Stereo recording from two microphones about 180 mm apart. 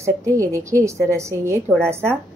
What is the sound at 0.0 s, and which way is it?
Speech, 15° right (ahead or behind).